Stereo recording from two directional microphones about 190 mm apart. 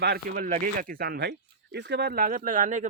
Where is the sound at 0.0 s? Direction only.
55° right (ahead or behind).